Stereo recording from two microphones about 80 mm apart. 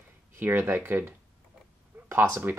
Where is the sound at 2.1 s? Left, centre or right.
Right.